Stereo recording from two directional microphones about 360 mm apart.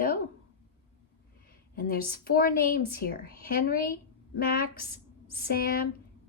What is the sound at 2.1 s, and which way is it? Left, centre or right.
A woman's voice, left.